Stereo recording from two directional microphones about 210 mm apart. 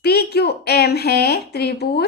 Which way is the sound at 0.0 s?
50° left (ahead or behind).